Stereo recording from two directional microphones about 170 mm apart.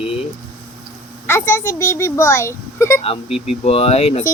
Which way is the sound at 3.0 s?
35° left (ahead or behind).